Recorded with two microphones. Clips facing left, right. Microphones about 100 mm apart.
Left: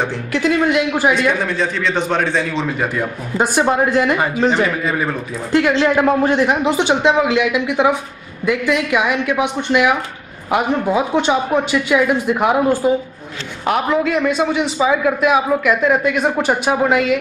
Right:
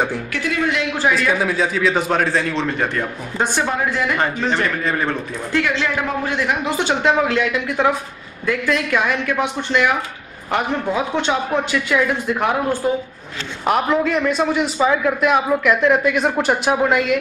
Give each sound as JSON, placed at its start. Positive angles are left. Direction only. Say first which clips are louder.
{"t": 0.3, "sound": "speech", "louder": "left 5 dB", "side_deg": 20}
{"t": 1.4, "sound": "a man's voice", "louder": "right 1 dB", "side_deg": -5}
{"t": 3.6, "sound": "speech", "louder": "left 6 dB", "side_deg": 30}
{"t": 4.5, "sound": "speech", "louder": "left 3 dB", "side_deg": 10}
{"t": 5.8, "sound": "a man's voice", "louder": "left 8 dB", "side_deg": 35}